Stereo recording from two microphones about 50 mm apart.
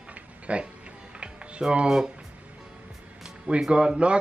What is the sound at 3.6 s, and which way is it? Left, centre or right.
Speech, centre.